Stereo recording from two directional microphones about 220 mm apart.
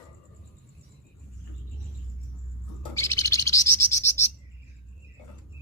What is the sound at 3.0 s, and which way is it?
Owl, 15° left (ahead or behind).